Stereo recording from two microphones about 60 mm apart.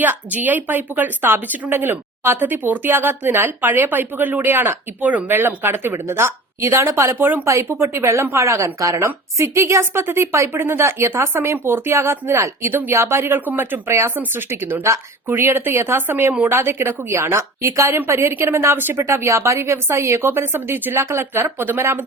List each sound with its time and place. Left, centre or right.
0.0 s a woman's voice: right
7.2 s a woman's voice: right
7.4 s a woman's voice: right
9.4 s a woman's voice: right
17.7 s a woman's voice: right
21.0 s a woman's voice: right